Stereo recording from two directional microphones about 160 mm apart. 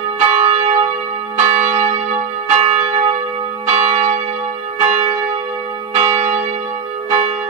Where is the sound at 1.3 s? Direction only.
40° right (ahead or behind).